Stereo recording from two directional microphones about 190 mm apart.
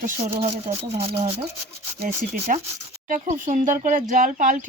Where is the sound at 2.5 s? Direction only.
40° right (ahead or behind).